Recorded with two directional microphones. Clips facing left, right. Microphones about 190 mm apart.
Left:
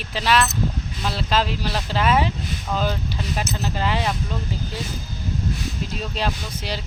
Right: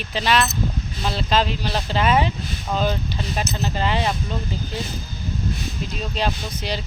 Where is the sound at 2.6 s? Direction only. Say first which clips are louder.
Right 2 dB; 20° right (ahead or behind).